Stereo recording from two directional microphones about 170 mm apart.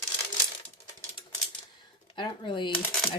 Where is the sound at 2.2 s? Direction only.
30° left (ahead or behind).